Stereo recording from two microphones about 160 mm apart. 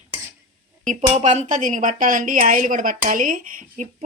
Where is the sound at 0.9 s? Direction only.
50° right (ahead or behind).